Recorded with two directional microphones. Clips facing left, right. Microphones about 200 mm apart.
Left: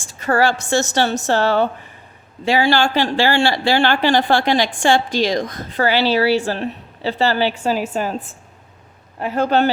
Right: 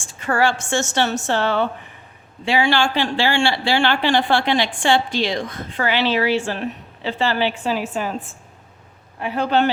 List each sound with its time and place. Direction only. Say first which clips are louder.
0.0 s speech: left 2 dB; 40° left (ahead or behind)
9.2 s speech: left 2 dB; 45° left (ahead or behind)